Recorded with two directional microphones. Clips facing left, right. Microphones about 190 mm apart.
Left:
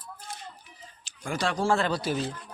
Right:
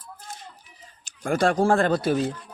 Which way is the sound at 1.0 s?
50° right (ahead or behind).